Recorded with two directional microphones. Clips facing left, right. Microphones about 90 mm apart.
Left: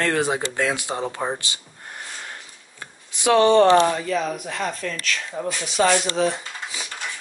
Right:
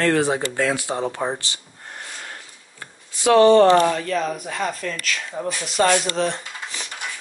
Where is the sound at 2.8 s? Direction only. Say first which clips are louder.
Right 2 dB; 20° left (ahead or behind).